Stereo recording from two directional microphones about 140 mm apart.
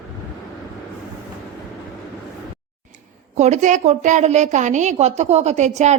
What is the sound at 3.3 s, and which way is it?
A woman's voice, 55° right (ahead or behind).